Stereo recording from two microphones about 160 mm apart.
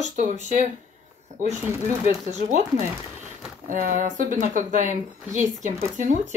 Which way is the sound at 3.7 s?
55° right (ahead or behind).